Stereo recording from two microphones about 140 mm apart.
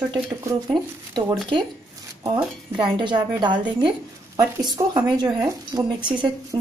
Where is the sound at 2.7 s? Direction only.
35° right (ahead or behind).